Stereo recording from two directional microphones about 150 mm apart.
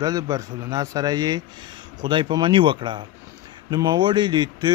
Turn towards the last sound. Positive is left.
turn(degrees=-30)  # may be behind; listen again after turning